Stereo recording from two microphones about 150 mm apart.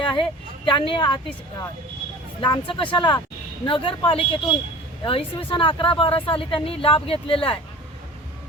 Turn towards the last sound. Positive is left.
turn(degrees=35)  # may be behind; listen again after turning